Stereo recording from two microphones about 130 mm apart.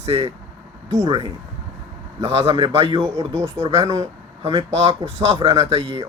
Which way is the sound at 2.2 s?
45° right (ahead or behind).